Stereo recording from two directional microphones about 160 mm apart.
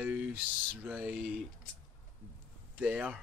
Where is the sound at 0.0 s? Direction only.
10° right (ahead or behind).